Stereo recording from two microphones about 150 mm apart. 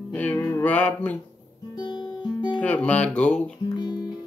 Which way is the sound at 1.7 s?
30° left (ahead or behind).